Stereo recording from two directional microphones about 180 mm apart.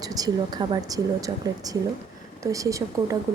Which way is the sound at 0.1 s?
20° right (ahead or behind).